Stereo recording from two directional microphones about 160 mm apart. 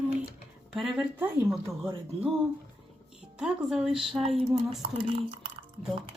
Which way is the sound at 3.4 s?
5° right (ahead or behind).